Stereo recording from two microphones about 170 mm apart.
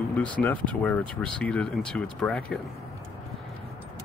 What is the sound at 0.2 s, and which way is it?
Speech, 10° left (ahead or behind).